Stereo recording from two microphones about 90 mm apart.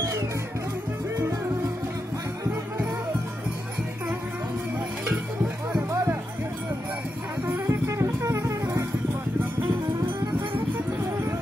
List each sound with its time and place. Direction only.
7.6 s music: 35° right (ahead or behind)